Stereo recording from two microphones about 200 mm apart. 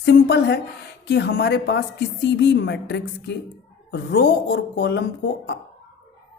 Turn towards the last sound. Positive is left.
turn(degrees=55)  # may be behind; listen again after turning